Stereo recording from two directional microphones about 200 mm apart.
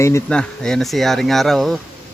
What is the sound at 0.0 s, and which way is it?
Speech, 15° left (ahead or behind).